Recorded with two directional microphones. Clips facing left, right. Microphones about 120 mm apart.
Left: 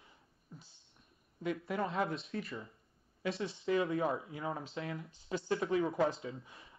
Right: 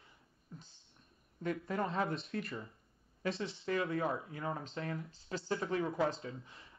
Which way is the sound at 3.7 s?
20° left (ahead or behind).